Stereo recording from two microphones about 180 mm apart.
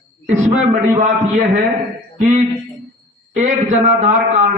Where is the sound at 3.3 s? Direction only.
40° right (ahead or behind).